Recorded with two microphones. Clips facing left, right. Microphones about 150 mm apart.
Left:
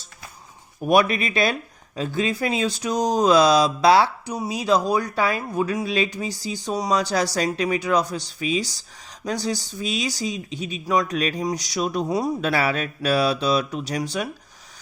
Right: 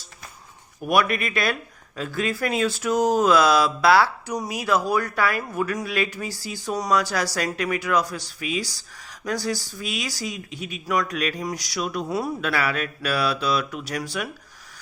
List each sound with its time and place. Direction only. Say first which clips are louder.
1.2 s speech: left 3 dB; 25° left (ahead or behind)
11.3 s speech: left 4 dB; 20° left (ahead or behind)
11.8 s speech: left 3 dB; 35° left (ahead or behind)
12.0 s speech: left 3 dB; 15° left (ahead or behind)
12.4 s speech: left 3 dB; 30° left (ahead or behind)
13.6 s speech: left 3 dB; 40° left (ahead or behind)
13.8 s speech: left 3 dB; 20° left (ahead or behind)